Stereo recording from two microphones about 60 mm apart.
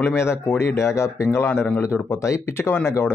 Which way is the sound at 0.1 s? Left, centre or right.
Left.